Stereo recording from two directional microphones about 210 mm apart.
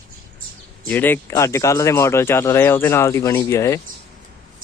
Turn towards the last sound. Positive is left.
turn(degrees=15)  # may be behind; listen again after turning